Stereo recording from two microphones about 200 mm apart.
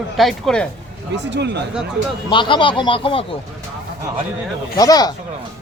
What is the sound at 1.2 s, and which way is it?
Speech, 60° right (ahead or behind).